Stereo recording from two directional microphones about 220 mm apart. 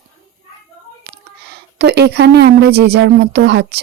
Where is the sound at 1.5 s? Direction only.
50° right (ahead or behind).